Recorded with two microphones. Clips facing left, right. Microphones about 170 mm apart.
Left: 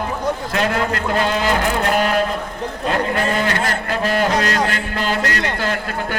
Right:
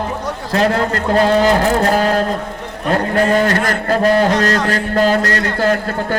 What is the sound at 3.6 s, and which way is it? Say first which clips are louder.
A man's voice: right 6 dB; 40° right (ahead or behind).